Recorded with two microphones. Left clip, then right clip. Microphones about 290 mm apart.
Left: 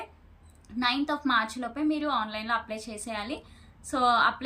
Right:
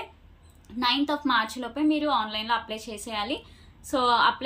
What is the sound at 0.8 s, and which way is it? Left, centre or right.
A woman's voice, centre.